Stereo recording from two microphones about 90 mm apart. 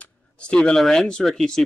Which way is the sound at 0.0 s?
10° left (ahead or behind).